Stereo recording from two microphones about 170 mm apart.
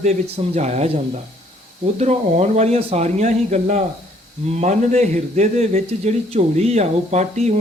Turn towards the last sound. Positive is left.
turn(degrees=-40)  # may be behind; listen again after turning